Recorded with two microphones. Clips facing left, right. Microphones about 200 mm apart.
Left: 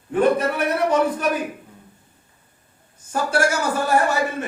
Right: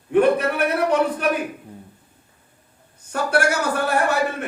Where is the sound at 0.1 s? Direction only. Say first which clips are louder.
Right 2 dB; 65° right (ahead or behind).